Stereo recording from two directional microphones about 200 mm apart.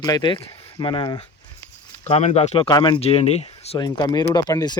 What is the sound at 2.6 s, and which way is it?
Speech, 20° left (ahead or behind).